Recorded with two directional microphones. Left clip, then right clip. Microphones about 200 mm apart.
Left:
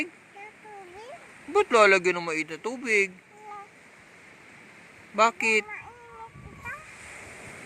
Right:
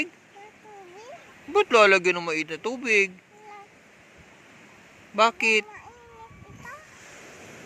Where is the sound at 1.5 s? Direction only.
5° right (ahead or behind).